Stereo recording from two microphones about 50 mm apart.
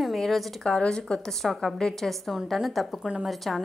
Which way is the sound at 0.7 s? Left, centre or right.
Centre.